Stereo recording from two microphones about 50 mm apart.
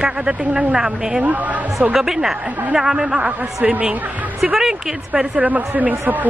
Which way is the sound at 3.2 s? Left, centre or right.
Right.